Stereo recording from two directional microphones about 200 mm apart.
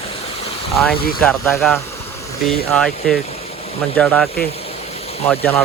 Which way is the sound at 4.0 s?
5° left (ahead or behind).